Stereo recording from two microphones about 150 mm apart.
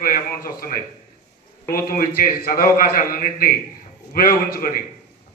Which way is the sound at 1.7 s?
75° left (ahead or behind).